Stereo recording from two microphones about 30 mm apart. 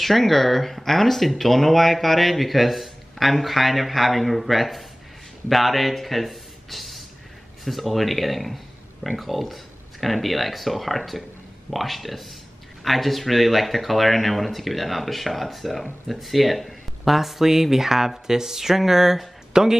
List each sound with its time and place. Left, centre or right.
0.0 s speech: centre